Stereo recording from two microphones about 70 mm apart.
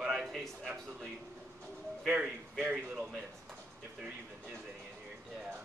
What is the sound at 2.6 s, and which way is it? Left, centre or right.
Speech, right.